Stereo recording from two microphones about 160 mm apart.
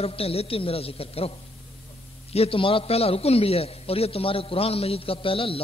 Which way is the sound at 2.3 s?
35° left (ahead or behind).